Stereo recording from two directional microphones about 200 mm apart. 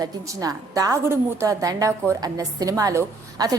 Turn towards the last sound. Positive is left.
turn(degrees=-15)  # may be behind; listen again after turning